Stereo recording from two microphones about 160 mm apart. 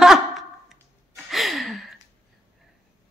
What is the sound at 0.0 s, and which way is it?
Sigh, centre (ahead or behind).